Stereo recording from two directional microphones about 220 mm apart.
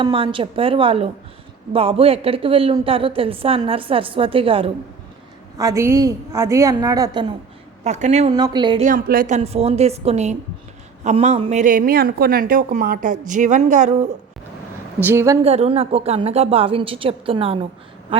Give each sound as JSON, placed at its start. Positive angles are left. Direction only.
{"t": 0.0, "sound": "a woman's voice", "side_deg": -25}
{"t": 7.9, "sound": "speech", "side_deg": -30}
{"t": 8.4, "sound": "a woman's voice", "side_deg": -20}
{"t": 8.9, "sound": "a woman's voice", "side_deg": -40}
{"t": 15.0, "sound": "a woman's voice", "side_deg": -10}
{"t": 15.4, "sound": "a woman's voice", "side_deg": -25}